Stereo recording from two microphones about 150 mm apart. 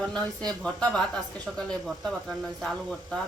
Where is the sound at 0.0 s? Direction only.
5° left (ahead or behind).